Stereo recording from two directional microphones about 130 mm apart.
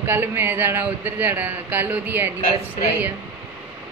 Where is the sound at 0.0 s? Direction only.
15° right (ahead or behind).